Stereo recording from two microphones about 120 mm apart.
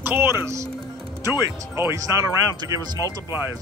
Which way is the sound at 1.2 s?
35° left (ahead or behind).